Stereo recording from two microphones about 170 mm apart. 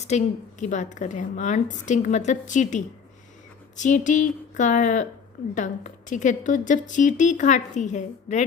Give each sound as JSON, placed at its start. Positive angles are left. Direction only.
{"t": 0.1, "sound": "a woman's voice", "side_deg": 45}